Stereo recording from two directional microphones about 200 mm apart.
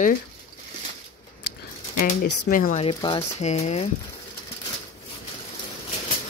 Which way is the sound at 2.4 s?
40° left (ahead or behind).